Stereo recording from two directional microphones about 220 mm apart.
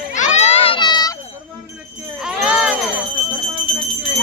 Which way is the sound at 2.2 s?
5° right (ahead or behind).